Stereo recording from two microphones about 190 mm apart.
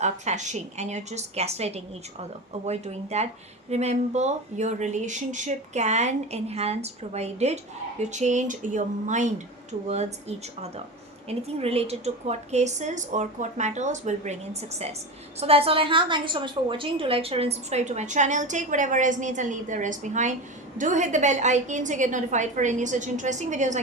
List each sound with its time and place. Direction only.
0.0 s speech: 40° right (ahead or behind)